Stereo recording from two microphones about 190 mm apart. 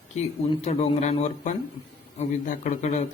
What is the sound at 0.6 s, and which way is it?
A man's voice, 35° left (ahead or behind).